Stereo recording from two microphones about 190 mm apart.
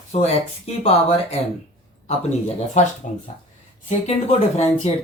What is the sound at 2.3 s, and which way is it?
Speech, 35° left (ahead or behind).